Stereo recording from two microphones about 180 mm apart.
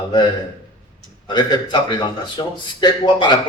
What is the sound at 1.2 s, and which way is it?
A man's voice, 25° left (ahead or behind).